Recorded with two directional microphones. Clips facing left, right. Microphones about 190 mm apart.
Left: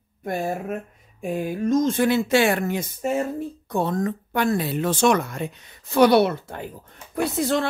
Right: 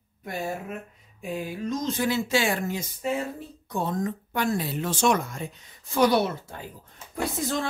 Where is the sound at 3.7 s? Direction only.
70° left (ahead or behind).